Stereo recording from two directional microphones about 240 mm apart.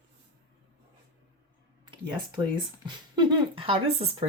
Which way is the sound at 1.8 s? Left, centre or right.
Centre.